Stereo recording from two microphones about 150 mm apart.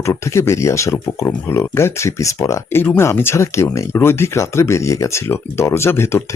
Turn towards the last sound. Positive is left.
turn(degrees=15)  # may be behind; listen again after turning